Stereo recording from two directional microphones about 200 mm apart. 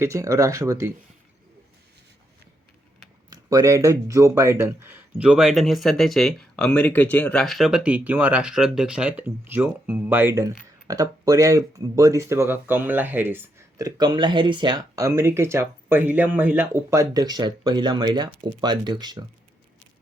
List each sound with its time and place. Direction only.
0.0 s speech: 15° right (ahead or behind)
3.5 s speech: 15° right (ahead or behind)